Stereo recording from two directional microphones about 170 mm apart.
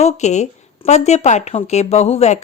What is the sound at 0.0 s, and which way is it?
Speech, 40° left (ahead or behind).